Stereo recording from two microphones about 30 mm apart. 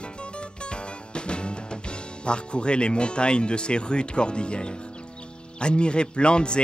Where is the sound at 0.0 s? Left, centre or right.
Left.